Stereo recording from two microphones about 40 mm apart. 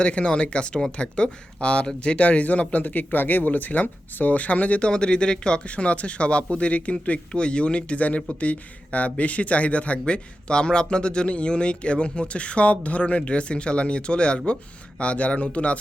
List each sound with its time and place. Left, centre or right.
0.0 s speech: left
4.9 s speech: left